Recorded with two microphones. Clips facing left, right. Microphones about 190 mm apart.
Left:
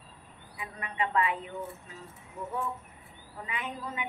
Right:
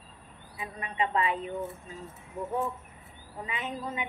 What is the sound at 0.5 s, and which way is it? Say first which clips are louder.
A woman's voice: right 2 dB; 25° right (ahead or behind).